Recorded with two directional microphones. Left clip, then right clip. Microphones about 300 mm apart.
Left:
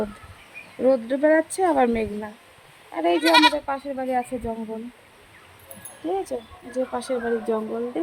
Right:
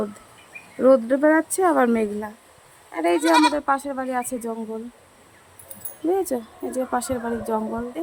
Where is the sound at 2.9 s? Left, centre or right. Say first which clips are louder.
Even; centre.